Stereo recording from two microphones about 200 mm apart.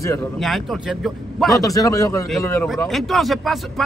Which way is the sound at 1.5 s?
15° left (ahead or behind).